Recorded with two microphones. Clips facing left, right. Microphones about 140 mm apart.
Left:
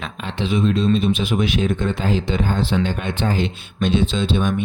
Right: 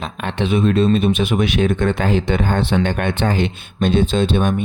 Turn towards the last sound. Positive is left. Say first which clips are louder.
# right 3 dB
turn(degrees=-55)  # may be behind; listen again after turning